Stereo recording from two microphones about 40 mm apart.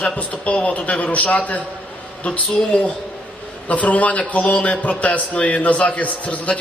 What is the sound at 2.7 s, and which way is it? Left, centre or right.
A man's voice, left.